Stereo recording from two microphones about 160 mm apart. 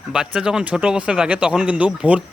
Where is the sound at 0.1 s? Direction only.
5° right (ahead or behind).